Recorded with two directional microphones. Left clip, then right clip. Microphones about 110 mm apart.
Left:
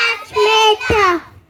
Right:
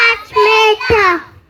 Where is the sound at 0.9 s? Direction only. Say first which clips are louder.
Right 3 dB; 35° left (ahead or behind).